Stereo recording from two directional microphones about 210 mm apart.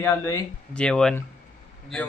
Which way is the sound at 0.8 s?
5° left (ahead or behind).